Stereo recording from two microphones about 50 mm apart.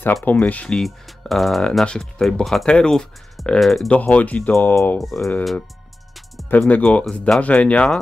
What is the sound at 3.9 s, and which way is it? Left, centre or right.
Speech, left.